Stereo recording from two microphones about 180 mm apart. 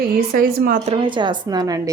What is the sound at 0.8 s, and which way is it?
A woman's voice, 30° right (ahead or behind).